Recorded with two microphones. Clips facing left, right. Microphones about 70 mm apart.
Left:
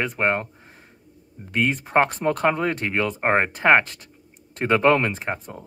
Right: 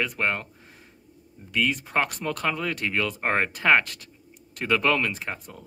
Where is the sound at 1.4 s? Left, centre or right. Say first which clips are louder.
Left 3 dB; left.